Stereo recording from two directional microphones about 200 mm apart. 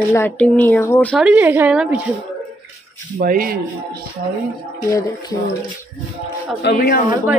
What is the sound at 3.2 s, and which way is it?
Speech, 45° right (ahead or behind).